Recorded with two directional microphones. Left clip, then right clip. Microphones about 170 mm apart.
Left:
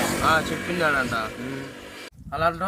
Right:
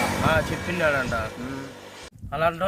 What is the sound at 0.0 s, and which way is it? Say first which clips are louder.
A man's voice: left 1 dB; 75° left (ahead or behind).